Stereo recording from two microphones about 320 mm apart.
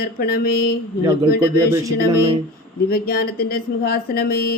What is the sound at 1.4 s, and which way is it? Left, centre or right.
Speech, centre.